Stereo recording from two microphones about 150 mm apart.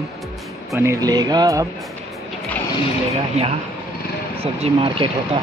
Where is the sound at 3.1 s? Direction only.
45° right (ahead or behind).